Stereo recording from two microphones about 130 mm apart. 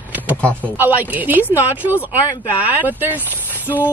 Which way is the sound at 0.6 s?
15° right (ahead or behind).